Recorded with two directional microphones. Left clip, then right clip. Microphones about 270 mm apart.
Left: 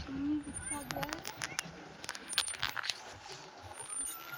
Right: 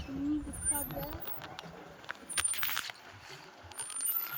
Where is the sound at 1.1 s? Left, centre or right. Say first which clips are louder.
Left 5 dB; left.